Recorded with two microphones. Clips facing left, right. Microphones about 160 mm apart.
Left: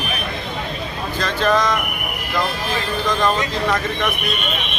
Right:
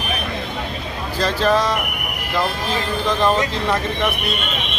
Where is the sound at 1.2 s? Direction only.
35° right (ahead or behind).